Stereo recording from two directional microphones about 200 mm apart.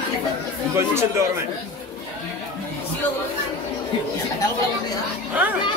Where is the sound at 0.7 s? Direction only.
15° right (ahead or behind).